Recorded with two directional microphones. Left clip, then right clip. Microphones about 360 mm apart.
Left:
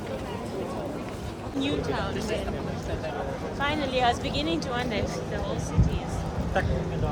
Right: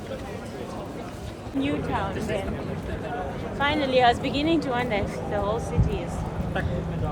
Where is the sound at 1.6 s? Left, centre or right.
Centre.